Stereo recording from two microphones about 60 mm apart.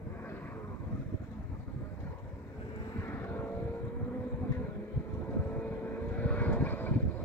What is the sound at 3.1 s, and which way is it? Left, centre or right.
Vehicle, left.